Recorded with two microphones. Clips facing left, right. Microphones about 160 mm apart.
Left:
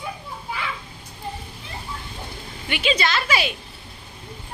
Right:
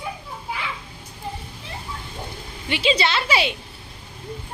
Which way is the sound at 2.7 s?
30° right (ahead or behind).